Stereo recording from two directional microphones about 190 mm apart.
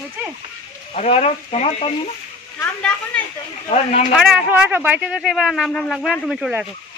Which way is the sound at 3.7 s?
35° left (ahead or behind).